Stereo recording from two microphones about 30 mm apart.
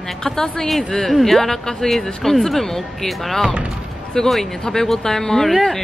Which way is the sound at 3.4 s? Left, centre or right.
Right.